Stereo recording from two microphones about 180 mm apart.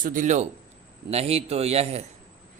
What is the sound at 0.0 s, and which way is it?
A man's voice, 45° right (ahead or behind).